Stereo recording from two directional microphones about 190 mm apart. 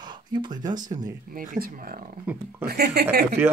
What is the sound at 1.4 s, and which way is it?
Speech, 50° right (ahead or behind).